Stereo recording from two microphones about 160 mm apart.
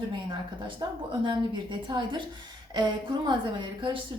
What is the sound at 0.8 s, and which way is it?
A woman's voice, 25° right (ahead or behind).